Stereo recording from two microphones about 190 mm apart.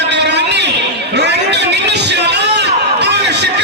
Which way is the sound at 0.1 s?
65° right (ahead or behind).